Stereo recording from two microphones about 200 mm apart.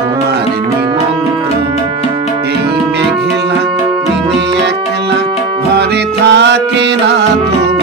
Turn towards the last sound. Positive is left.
turn(degrees=-60)  # may be behind; listen again after turning